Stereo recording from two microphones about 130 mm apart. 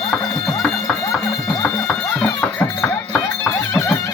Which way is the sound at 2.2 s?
5° left (ahead or behind).